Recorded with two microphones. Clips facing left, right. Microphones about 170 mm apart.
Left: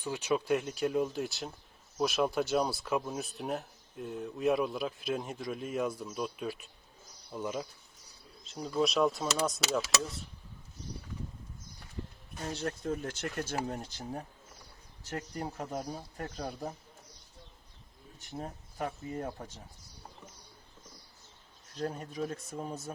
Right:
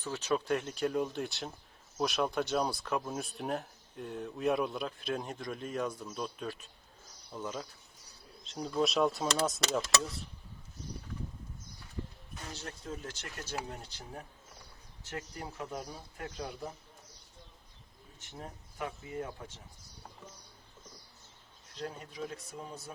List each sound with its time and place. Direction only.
0.0 s speech: 10° left (ahead or behind)
12.5 s speech: 55° left (ahead or behind)
15.1 s speech: 40° left (ahead or behind)
18.2 s speech: 35° left (ahead or behind)
21.8 s speech: 45° left (ahead or behind)